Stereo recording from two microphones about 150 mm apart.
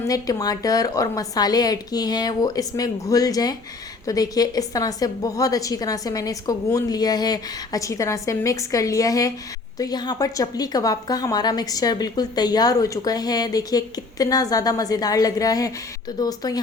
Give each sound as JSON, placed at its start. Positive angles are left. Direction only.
{"t": 0.1, "sound": "a woman's voice", "side_deg": 25}